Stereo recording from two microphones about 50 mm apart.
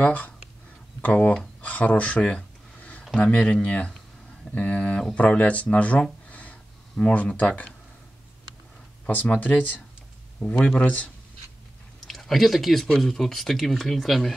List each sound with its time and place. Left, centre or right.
0.0 s speech: left
1.6 s a sound: left
3.2 s speech: left
6.2 s a sound: left
9.0 s speech: left
12.1 s speech: centre